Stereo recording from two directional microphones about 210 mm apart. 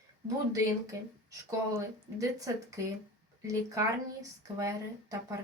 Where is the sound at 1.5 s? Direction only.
15° right (ahead or behind).